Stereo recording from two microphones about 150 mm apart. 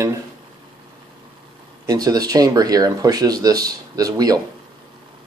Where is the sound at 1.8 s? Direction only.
25° right (ahead or behind).